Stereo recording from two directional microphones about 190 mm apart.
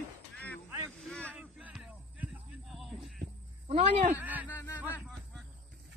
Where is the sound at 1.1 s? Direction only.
5° left (ahead or behind).